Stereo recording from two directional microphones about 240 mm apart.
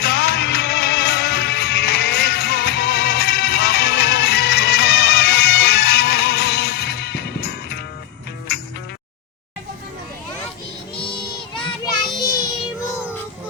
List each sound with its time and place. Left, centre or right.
0.0 s music: left
11.5 s child singing: centre